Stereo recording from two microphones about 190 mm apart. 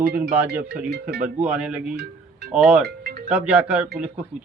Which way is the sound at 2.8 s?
55° right (ahead or behind).